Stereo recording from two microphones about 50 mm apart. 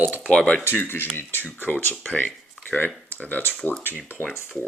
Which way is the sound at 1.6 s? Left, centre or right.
Left.